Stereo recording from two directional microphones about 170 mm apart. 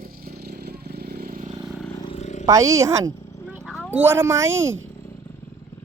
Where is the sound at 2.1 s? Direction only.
40° left (ahead or behind).